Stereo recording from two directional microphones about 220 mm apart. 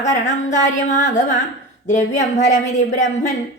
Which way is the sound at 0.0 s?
35° left (ahead or behind).